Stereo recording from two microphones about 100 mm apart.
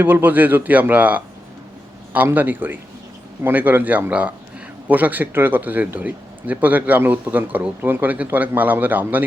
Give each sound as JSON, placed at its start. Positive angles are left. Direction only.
{"t": 0.0, "sound": "speech", "side_deg": -20}